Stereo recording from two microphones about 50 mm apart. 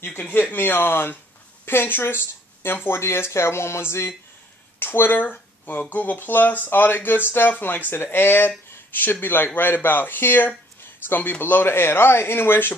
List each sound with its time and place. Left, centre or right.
0.2 s speech: left
4.7 s speech: left